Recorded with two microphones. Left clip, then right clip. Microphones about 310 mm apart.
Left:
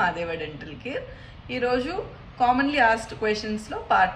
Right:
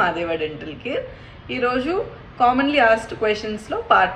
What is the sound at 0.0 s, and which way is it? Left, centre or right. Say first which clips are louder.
A woman's voice: right 5 dB; centre.